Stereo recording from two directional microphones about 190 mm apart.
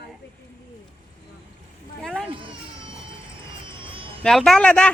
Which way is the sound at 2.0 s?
5° left (ahead or behind).